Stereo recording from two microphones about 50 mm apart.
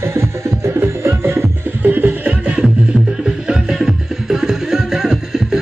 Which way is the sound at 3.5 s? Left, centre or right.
Centre.